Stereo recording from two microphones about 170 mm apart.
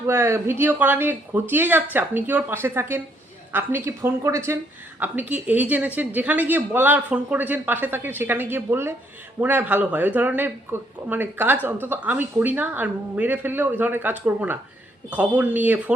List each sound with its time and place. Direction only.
0.1 s speech: 15° right (ahead or behind)